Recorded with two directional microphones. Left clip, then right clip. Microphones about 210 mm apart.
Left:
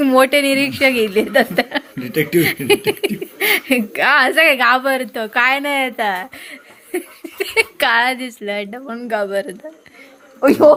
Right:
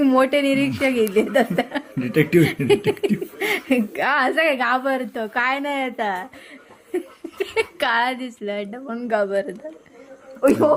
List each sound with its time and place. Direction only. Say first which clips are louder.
0.0 s a woman's voice: left 5 dB; 5° left (ahead or behind)
2.0 s speech: even; 45° right (ahead or behind)
2.6 s a woman's voice: left 3 dB; 5° left (ahead or behind)
10.4 s speech: left 6 dB; 30° left (ahead or behind)